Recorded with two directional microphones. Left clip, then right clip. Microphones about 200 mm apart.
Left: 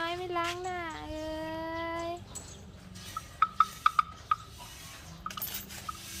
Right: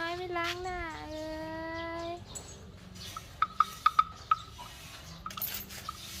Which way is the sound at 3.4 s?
10° right (ahead or behind).